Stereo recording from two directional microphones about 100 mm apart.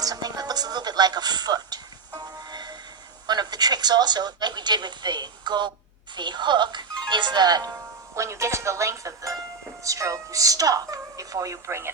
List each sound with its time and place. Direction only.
0.0 s music: 40° right (ahead or behind)
3.2 s speech: 45° right (ahead or behind)
8.1 s speech: 30° right (ahead or behind)